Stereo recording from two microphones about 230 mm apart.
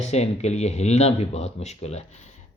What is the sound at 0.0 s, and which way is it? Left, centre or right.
Speech, left.